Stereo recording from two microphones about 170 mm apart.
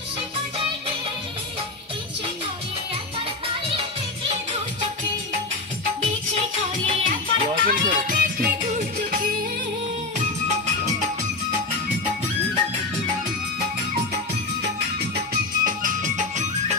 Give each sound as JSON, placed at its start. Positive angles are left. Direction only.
{"t": 5.9, "sound": "music", "side_deg": -35}
{"t": 7.6, "sound": "music", "side_deg": -50}
{"t": 14.6, "sound": "music", "side_deg": -75}
{"t": 15.6, "sound": "music", "side_deg": -50}